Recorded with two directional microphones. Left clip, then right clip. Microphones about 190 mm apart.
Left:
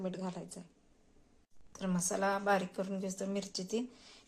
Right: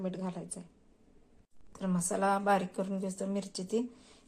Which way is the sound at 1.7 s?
Centre (ahead or behind).